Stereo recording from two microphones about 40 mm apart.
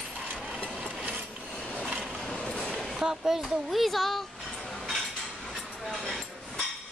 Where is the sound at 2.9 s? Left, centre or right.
Centre.